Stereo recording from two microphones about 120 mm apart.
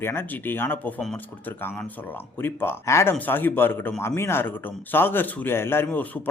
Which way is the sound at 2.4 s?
20° left (ahead or behind).